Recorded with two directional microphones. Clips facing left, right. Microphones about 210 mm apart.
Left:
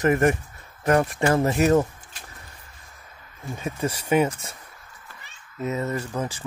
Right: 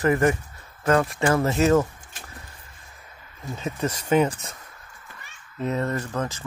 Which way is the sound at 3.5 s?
10° left (ahead or behind).